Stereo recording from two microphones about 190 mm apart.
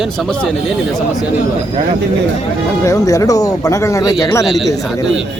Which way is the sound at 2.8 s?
15° left (ahead or behind).